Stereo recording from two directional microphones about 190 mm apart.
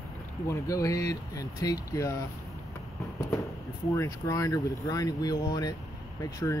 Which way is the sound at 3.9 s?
15° left (ahead or behind).